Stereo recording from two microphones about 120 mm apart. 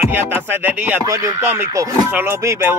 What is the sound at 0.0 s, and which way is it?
Music, 15° right (ahead or behind).